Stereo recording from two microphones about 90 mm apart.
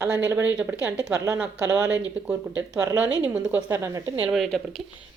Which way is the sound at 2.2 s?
10° right (ahead or behind).